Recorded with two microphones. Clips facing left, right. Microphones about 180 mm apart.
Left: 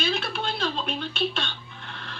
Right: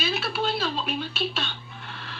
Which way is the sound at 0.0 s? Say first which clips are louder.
Right 1 dB; 5° right (ahead or behind).